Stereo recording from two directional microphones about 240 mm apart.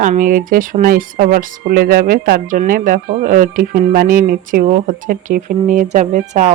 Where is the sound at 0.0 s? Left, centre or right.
Right.